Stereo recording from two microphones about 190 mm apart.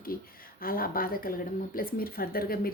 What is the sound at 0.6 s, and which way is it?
Speech, 50° left (ahead or behind).